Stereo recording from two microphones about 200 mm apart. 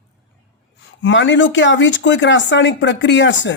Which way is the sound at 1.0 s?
65° left (ahead or behind).